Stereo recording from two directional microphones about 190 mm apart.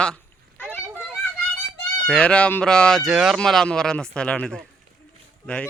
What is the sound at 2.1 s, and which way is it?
A child's voice, 5° left (ahead or behind).